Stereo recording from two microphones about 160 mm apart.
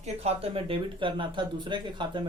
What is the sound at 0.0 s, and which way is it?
Speech, 40° right (ahead or behind).